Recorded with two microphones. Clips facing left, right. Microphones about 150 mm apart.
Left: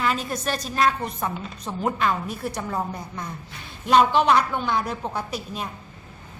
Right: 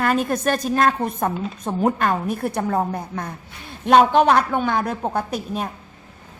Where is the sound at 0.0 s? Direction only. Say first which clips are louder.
Right 6 dB; 50° right (ahead or behind).